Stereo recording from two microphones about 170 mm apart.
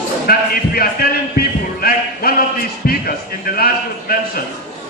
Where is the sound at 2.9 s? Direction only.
60° left (ahead or behind).